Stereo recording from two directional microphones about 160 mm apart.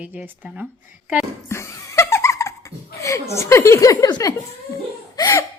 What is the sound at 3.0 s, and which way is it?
Speech, 20° left (ahead or behind).